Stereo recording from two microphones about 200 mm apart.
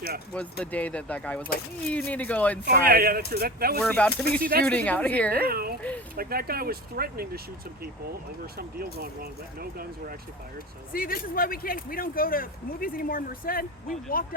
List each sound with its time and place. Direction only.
0.6 s speech: 5° left (ahead or behind)
2.6 s speech: 50° right (ahead or behind)
3.8 s speech: 10° left (ahead or behind)
4.4 s speech: 45° right (ahead or behind)
4.6 s speech: 5° left (ahead or behind)
5.4 s speech: 50° right (ahead or behind)
8.5 s speech: 50° right (ahead or behind)
10.9 s speech: 45° left (ahead or behind)